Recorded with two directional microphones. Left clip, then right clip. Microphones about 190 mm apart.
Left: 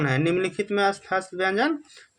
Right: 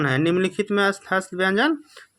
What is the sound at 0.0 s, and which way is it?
Speech, 30° right (ahead or behind).